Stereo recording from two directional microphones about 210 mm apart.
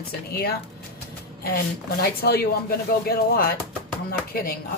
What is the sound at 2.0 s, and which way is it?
Speech, 45° left (ahead or behind).